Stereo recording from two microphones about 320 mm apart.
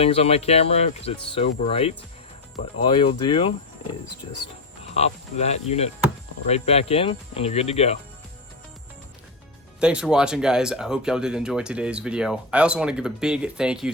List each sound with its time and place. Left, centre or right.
0.0 s speech: centre
4.9 s speech: centre
9.8 s speech: centre